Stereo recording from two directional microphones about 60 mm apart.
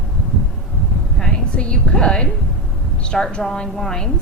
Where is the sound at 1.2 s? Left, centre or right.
Centre.